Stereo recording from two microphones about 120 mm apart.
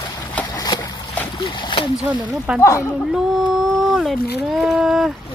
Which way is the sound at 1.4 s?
45° left (ahead or behind).